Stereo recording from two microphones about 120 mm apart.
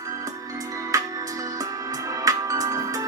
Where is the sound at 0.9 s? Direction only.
30° right (ahead or behind).